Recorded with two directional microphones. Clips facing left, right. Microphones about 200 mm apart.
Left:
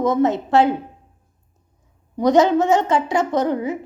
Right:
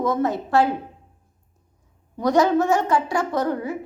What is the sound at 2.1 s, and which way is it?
Speech, 20° left (ahead or behind).